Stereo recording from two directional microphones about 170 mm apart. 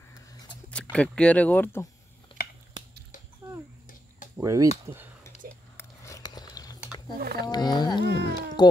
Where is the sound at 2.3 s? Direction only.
30° left (ahead or behind).